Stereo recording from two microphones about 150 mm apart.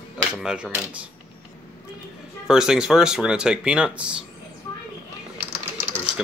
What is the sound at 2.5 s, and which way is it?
Speech, 5° right (ahead or behind).